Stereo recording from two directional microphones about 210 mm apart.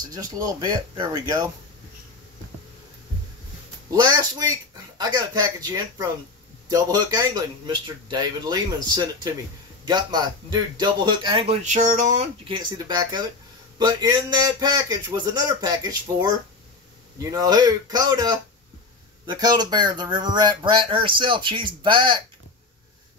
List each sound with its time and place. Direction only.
0.1 s speech: 15° right (ahead or behind)
3.9 s speech: 20° right (ahead or behind); by 12.3 s 35° right (ahead or behind)
12.4 s speech: 20° right (ahead or behind)